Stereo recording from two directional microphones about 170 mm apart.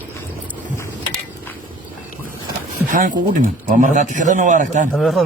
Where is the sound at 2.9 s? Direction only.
50° right (ahead or behind).